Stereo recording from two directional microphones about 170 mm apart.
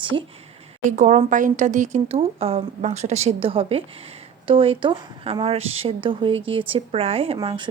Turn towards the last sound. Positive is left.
turn(degrees=-30)  # may be behind; listen again after turning